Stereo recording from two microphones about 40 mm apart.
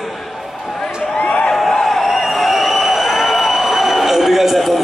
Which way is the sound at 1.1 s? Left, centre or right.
Left.